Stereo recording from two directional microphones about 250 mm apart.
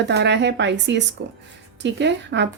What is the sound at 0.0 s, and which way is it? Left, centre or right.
Speech, right.